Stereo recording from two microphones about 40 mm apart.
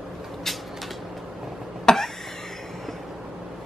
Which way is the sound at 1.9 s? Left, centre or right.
Centre.